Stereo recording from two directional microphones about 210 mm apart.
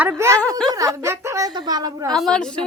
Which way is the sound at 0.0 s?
10° right (ahead or behind).